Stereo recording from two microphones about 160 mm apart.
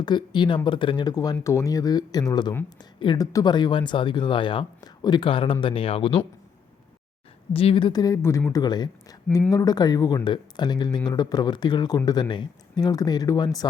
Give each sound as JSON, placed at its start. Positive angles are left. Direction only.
{"t": 0.0, "sound": "speech", "side_deg": 30}
{"t": 7.5, "sound": "speech", "side_deg": 35}